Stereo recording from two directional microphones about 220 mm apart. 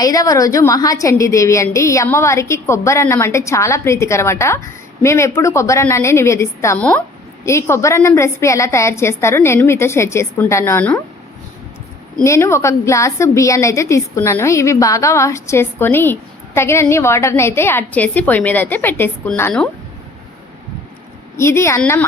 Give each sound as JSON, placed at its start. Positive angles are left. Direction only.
{"t": 0.0, "sound": "a woman's voice", "side_deg": 15}
{"t": 12.2, "sound": "a woman's voice", "side_deg": 15}
{"t": 21.3, "sound": "a woman's voice", "side_deg": 10}